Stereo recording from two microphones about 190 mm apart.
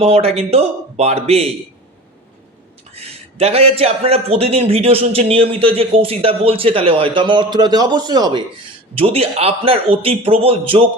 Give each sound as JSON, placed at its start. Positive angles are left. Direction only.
{"t": 0.0, "sound": "speech", "side_deg": -30}
{"t": 2.9, "sound": "a man's voice", "side_deg": -30}